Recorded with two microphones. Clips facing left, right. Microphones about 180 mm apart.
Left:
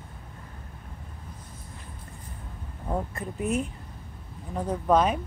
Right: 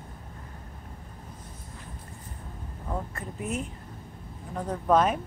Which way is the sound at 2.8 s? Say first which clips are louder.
Left 4 dB; 20° left (ahead or behind).